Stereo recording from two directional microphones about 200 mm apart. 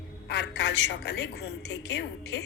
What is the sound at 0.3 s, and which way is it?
A woman's voice, 55° left (ahead or behind).